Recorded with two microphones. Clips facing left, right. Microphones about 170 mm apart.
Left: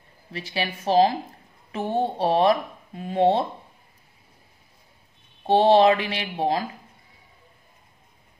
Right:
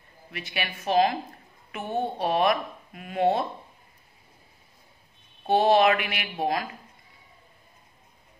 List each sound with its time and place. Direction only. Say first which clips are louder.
0.3 s a woman's voice: left 4 dB; 30° left (ahead or behind)
5.5 s speech: left 3 dB; 30° left (ahead or behind)